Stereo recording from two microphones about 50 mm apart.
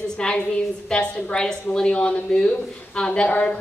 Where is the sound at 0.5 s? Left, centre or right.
Centre.